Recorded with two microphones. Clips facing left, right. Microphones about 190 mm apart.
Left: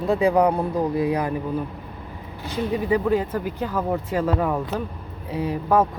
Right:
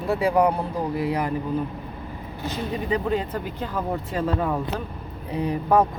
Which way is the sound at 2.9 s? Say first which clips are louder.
Left 3 dB; 10° left (ahead or behind).